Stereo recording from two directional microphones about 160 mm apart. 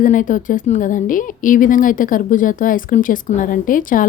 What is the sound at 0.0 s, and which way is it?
A woman's voice, 55° left (ahead or behind).